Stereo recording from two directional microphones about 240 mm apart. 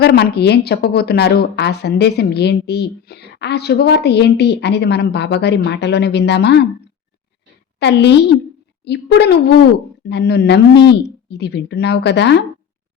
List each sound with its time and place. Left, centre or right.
0.0 s a woman's voice: left
7.8 s a woman's voice: left